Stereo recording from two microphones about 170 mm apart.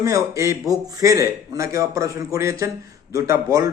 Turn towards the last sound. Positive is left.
turn(degrees=-20)  # may be behind; listen again after turning